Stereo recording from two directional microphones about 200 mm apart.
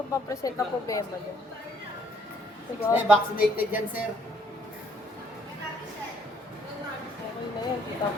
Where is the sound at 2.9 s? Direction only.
5° right (ahead or behind).